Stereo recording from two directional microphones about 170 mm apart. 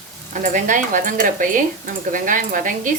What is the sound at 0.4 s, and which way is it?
Speech, 50° right (ahead or behind).